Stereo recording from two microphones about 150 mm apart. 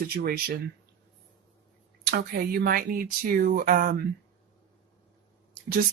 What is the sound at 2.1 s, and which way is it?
Speech, 90° right.